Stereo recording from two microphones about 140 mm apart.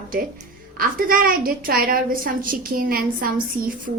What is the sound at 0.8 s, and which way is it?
A woman's voice, 90° right.